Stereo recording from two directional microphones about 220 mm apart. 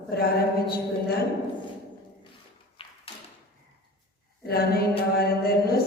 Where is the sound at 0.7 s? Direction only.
45° left (ahead or behind).